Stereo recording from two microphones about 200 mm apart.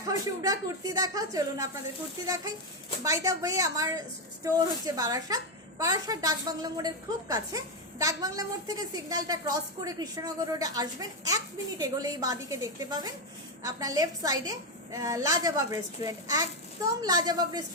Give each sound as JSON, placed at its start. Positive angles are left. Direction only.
{"t": 0.0, "sound": "a woman's voice", "side_deg": -15}